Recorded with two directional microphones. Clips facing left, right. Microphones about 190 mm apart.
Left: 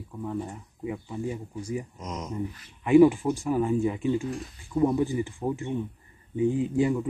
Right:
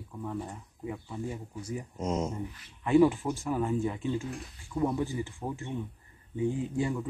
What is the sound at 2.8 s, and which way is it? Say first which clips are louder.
Speech: left 5 dB; 15° left (ahead or behind).